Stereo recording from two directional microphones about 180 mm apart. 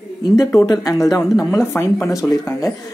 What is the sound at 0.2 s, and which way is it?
Speech, 20° left (ahead or behind).